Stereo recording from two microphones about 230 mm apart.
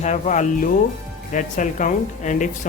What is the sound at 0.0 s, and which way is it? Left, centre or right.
Speech, left.